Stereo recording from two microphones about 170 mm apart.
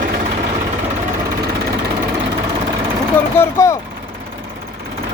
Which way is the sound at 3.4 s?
15° left (ahead or behind).